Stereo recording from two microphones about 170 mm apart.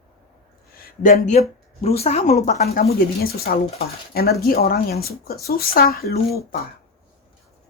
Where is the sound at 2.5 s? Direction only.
65° left (ahead or behind).